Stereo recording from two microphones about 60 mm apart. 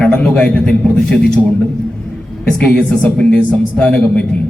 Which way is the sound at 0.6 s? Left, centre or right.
Centre.